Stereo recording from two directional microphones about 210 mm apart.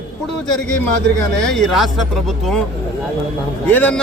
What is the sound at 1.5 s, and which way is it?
Speech, centre (ahead or behind).